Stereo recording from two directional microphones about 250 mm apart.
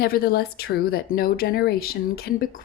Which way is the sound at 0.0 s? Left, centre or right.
Left.